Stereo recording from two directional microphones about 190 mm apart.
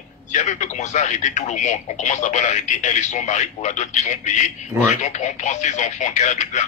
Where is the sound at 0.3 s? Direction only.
40° left (ahead or behind).